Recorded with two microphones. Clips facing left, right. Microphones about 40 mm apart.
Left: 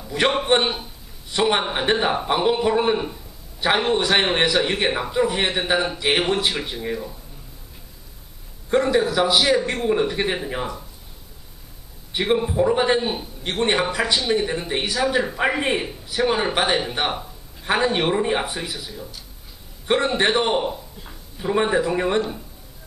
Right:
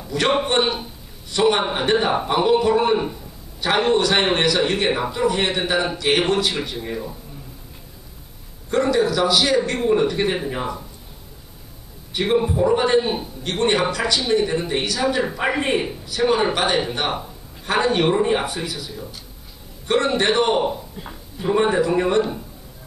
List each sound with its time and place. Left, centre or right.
0.1 s a man's voice: centre
0.5 s speech: centre
8.9 s speech: centre
12.2 s speech: centre
19.9 s speech: centre
20.7 s speech: centre
21.5 s speech: centre